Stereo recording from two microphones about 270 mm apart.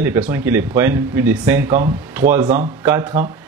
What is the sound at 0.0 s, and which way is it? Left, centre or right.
Speech, centre.